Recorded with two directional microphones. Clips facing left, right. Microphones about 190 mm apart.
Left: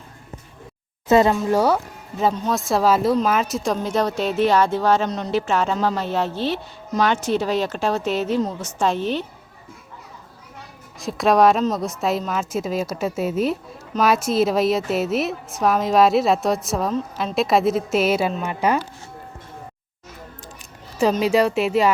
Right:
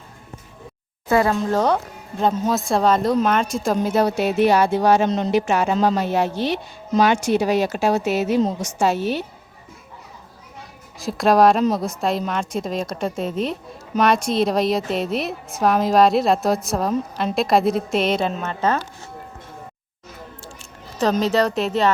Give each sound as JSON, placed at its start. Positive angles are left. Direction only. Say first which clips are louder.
{"t": 1.0, "sound": "speech", "louder": "left 3 dB", "side_deg": 20}
{"t": 1.4, "sound": "a woman's voice", "louder": "left 1 dB", "side_deg": 10}
{"t": 5.0, "sound": "speech", "louder": "right 3 dB", "side_deg": -25}
{"t": 11.0, "sound": "a woman's voice", "louder": "right 1 dB", "side_deg": 0}
{"t": 21.0, "sound": "speech", "louder": "left 1 dB", "side_deg": 10}